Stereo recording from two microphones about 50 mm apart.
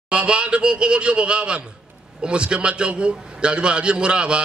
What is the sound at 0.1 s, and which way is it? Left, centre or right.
A man's voice, right.